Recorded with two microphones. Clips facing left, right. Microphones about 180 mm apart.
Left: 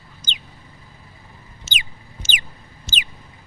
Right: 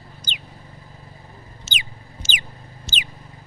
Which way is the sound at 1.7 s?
50° left (ahead or behind).